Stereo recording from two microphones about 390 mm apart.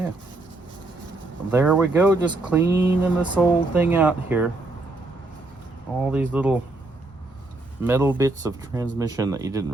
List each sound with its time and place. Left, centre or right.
1.5 s speech: centre
6.0 s speech: centre
7.9 s speech: centre